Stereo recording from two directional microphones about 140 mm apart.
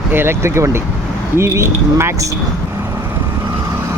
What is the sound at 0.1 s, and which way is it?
Speech, 15° right (ahead or behind).